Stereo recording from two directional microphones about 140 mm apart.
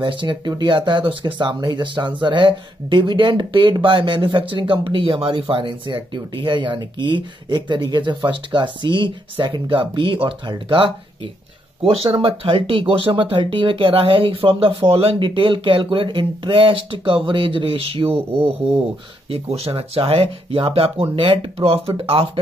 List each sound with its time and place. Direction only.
0.0 s speech: 35° right (ahead or behind)